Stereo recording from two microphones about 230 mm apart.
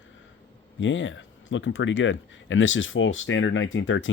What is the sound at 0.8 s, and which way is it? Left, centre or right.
Speech, left.